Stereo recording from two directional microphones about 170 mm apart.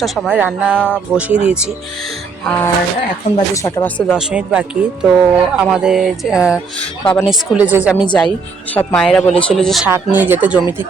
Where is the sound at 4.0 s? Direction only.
5° right (ahead or behind).